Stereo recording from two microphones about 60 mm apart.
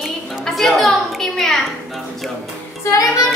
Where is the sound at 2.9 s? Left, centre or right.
Left.